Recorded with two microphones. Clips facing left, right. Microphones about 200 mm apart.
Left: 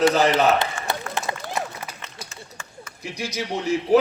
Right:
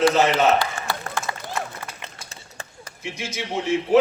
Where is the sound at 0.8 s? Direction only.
35° right (ahead or behind).